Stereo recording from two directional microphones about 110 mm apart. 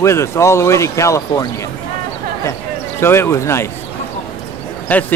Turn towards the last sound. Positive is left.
turn(degrees=15)  # may be behind; listen again after turning